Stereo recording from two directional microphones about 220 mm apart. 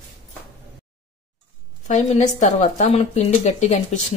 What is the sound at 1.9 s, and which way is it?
Speech, 35° left (ahead or behind).